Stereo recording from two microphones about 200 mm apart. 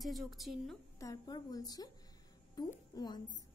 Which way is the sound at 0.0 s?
Centre (ahead or behind).